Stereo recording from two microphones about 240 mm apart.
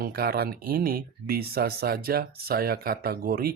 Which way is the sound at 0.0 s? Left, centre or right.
Right.